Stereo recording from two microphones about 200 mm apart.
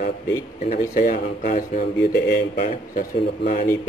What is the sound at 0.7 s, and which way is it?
Speech, 45° left (ahead or behind).